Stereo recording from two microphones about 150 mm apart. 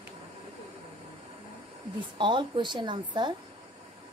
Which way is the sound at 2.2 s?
30° right (ahead or behind).